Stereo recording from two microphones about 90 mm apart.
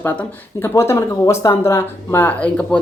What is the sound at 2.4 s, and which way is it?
Speech, 10° left (ahead or behind).